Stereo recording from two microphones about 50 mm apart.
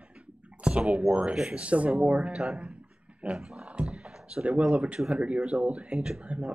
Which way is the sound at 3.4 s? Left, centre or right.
Centre.